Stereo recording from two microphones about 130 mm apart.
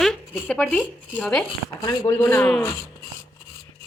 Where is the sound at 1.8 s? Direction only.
30° left (ahead or behind).